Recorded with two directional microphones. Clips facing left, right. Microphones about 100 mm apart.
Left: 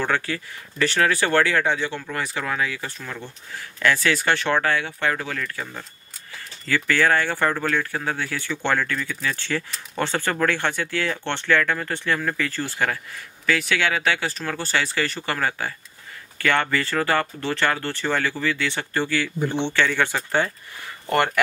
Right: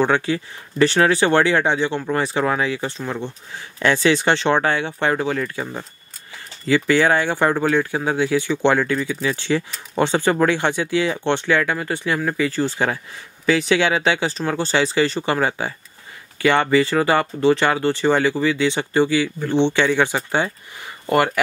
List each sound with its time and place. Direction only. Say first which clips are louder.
0.0 s speech: right 6 dB; 20° right (ahead or behind)